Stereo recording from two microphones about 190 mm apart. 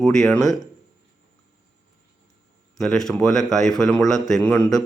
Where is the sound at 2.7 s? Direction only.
Centre (ahead or behind).